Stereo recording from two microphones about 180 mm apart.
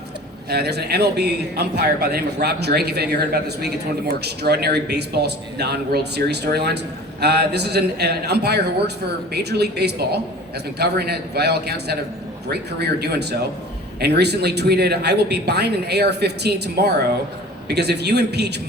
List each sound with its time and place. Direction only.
0.5 s a man's voice: 65° right (ahead or behind)